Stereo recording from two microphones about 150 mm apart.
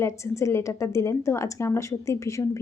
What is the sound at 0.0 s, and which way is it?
A woman's voice, 20° left (ahead or behind).